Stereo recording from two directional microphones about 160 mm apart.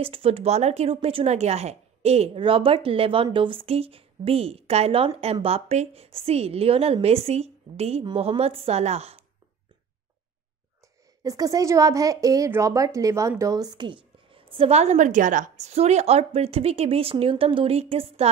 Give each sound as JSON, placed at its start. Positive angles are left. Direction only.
{"t": 0.0, "sound": "a woman's voice", "side_deg": -35}
{"t": 11.2, "sound": "a woman's voice", "side_deg": -20}